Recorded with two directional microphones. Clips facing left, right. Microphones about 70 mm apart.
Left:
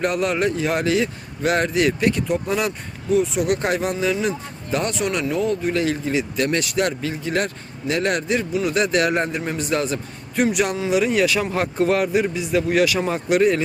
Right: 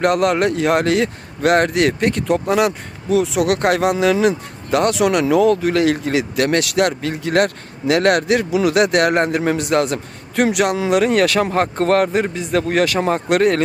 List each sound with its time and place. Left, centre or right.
0.0 s a man's voice: right